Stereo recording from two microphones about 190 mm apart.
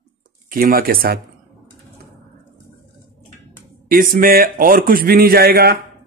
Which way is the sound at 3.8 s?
45° right (ahead or behind).